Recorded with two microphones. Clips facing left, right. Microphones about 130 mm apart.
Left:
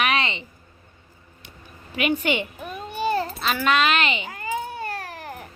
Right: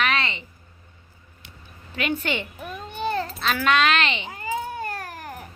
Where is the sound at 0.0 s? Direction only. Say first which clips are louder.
Left 1 dB; 15° left (ahead or behind).